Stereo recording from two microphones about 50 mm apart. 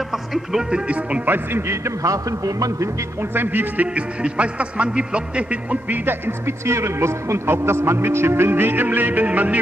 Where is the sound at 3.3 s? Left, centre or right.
Right.